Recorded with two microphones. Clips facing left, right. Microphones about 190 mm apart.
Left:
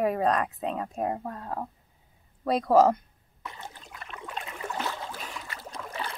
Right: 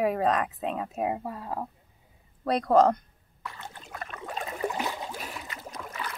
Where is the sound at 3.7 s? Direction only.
50° right (ahead or behind).